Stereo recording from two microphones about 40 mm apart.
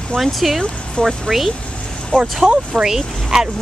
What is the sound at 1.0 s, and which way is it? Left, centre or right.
Speech, left.